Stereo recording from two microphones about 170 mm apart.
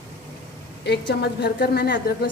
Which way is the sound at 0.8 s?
80° left.